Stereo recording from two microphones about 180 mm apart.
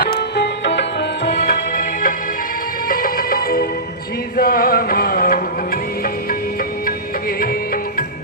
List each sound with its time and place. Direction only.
0.0 s music: 60° left (ahead or behind)
6.8 s music: 55° left (ahead or behind)